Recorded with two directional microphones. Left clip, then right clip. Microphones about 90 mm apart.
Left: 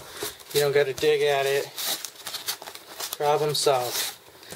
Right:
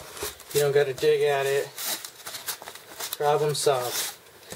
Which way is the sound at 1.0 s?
20° left (ahead or behind).